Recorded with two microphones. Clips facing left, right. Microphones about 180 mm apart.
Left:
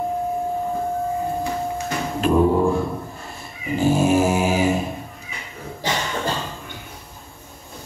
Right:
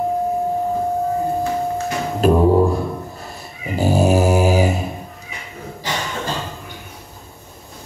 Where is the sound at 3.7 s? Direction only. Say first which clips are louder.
Right 1 dB; 40° right (ahead or behind).